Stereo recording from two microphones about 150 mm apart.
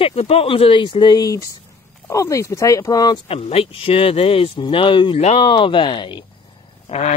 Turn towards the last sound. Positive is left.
turn(degrees=50)  # may be behind; listen again after turning